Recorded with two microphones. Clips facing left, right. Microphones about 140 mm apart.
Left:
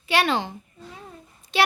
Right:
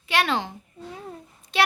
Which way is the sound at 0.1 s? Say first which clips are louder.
Left 2 dB; centre (ahead or behind).